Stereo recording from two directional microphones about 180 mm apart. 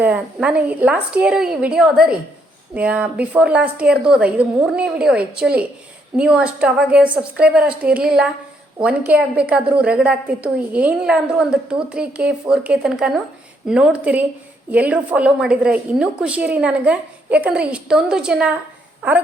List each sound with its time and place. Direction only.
0.0 s a woman's voice: 5° right (ahead or behind)